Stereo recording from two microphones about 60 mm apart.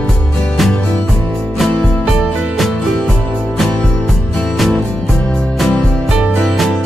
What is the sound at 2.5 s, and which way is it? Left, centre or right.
Music, centre.